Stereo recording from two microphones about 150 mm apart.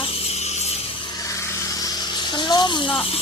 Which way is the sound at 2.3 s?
30° left (ahead or behind).